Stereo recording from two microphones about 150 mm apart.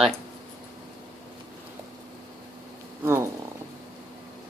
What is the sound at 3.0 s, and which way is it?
Frog, 15° right (ahead or behind).